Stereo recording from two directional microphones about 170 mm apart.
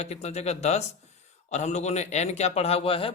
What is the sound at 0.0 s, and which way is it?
A man's voice, 40° left (ahead or behind).